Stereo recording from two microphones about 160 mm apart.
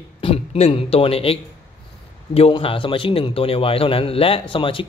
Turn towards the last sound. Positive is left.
turn(degrees=35)  # may be behind; listen again after turning